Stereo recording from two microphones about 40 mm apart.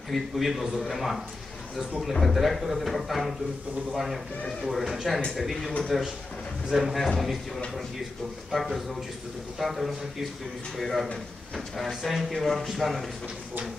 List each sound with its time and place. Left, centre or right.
0.1 s a man's voice: centre